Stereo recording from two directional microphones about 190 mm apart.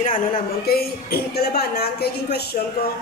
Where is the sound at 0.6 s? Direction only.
55° left (ahead or behind).